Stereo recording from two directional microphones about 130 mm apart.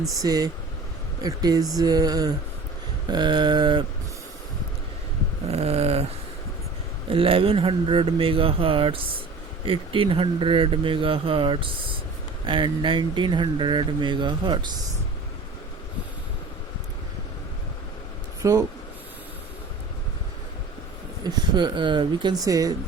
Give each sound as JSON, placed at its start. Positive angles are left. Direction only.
{"t": 0.2, "sound": "mantra", "side_deg": -30}
{"t": 3.1, "sound": "speech", "side_deg": -35}
{"t": 5.5, "sound": "speech", "side_deg": -55}
{"t": 7.1, "sound": "speech", "side_deg": -45}
{"t": 18.4, "sound": "mantra", "side_deg": -25}
{"t": 21.2, "sound": "speech", "side_deg": -35}